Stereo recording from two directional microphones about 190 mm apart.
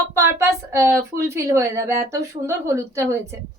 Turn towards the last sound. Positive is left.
turn(degrees=-15)  # may be behind; listen again after turning